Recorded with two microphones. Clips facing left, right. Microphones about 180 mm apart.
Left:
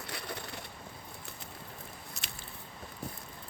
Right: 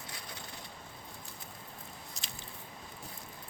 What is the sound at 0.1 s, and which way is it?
Crushing, 65° left (ahead or behind).